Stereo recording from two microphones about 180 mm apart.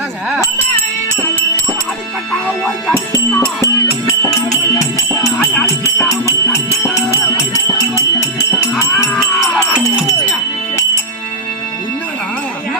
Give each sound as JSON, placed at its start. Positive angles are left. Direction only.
{"t": 4.4, "sound": "music", "side_deg": 20}